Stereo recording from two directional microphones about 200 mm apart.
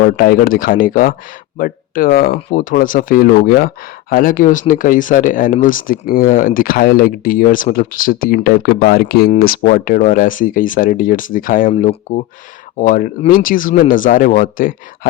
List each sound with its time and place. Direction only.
0.0 s speech: 45° left (ahead or behind)